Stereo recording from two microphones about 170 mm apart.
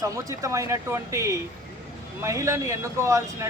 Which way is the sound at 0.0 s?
20° right (ahead or behind).